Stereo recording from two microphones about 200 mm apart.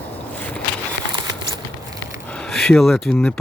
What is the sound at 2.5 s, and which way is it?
Speech, centre (ahead or behind).